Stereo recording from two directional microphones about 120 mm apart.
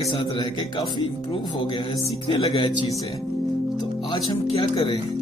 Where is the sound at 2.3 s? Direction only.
45° left (ahead or behind).